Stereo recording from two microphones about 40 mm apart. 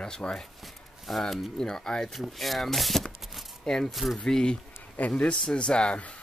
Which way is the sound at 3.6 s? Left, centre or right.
Centre.